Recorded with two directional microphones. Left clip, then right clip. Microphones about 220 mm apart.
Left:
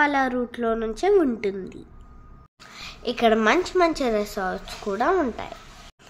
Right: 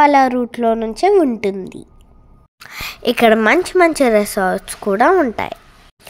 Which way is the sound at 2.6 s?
40° right (ahead or behind).